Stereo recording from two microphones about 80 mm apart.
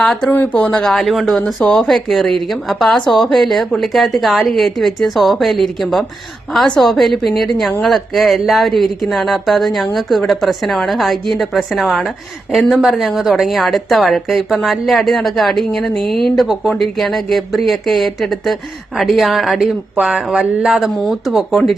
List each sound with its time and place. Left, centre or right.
0.0 s speech: centre
0.3 s speech: centre
0.9 s a woman's voice: centre